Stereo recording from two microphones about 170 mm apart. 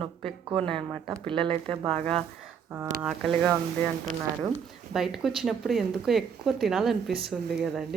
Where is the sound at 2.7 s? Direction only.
5° right (ahead or behind).